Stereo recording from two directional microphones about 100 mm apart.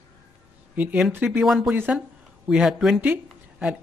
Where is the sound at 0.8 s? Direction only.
15° right (ahead or behind).